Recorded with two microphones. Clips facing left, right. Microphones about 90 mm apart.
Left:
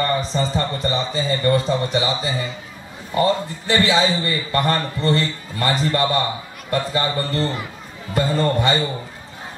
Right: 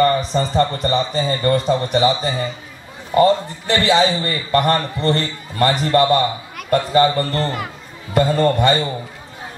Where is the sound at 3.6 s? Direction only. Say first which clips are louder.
Right 2 dB; 55° right (ahead or behind).